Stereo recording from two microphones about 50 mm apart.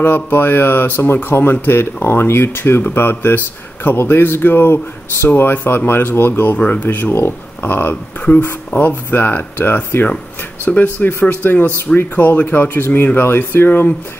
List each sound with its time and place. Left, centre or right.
0.0 s speech: left
6.5 s speech: left
7.9 s speech: left
8.5 s speech: left
10.7 s speech: left
11.1 s speech: left
11.5 s speech: left
12.0 s speech: left
12.4 s speech: left